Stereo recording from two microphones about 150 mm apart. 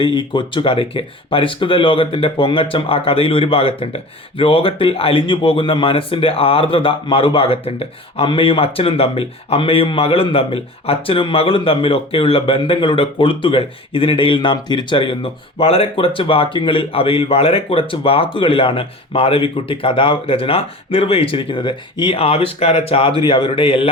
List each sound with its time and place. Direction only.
0.0 s speech: 35° left (ahead or behind)